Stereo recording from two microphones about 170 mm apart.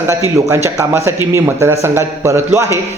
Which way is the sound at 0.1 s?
20° right (ahead or behind).